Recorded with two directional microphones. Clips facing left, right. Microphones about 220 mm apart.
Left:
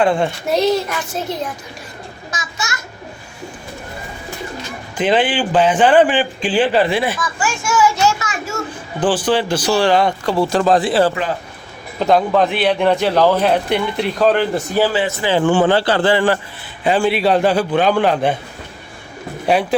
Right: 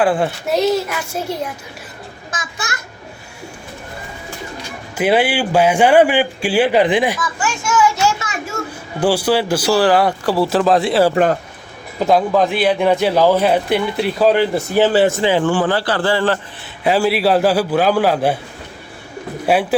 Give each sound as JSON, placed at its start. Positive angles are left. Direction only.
{"t": 0.0, "sound": "a man's voice", "side_deg": -5}
{"t": 2.3, "sound": "a child's voice", "side_deg": -55}
{"t": 4.9, "sound": "a man's voice", "side_deg": -10}
{"t": 7.3, "sound": "children playing", "side_deg": 10}
{"t": 9.0, "sound": "a man's voice", "side_deg": -10}
{"t": 11.1, "sound": "speech", "side_deg": -50}
{"t": 11.9, "sound": "a man's voice", "side_deg": -5}
{"t": 15.4, "sound": "a man's voice", "side_deg": 25}
{"t": 16.8, "sound": "a man's voice", "side_deg": -5}